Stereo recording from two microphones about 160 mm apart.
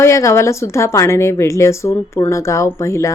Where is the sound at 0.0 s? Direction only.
20° left (ahead or behind).